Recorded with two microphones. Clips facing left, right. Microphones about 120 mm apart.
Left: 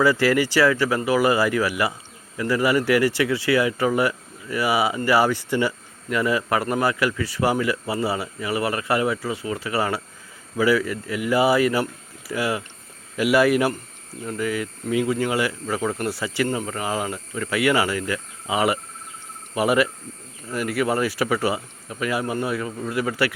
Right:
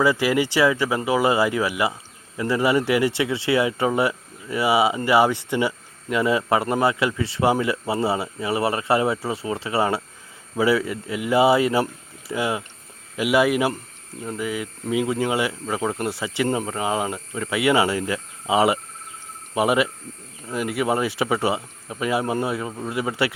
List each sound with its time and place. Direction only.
0.0 s speech: 20° right (ahead or behind)